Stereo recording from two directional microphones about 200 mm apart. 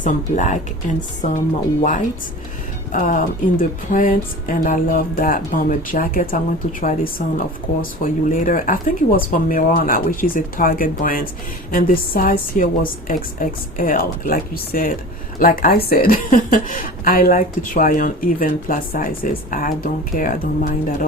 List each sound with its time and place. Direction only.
0.0 s a woman's voice: 40° left (ahead or behind)
1.8 s a woman's voice: 40° left (ahead or behind)